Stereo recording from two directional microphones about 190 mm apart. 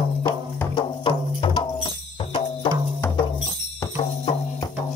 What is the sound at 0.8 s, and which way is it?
Music, 25° left (ahead or behind).